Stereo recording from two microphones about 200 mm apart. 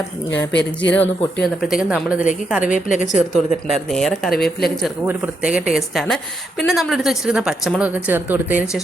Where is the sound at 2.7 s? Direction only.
40° left (ahead or behind).